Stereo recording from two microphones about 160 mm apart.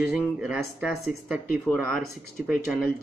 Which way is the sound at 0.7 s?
10° right (ahead or behind).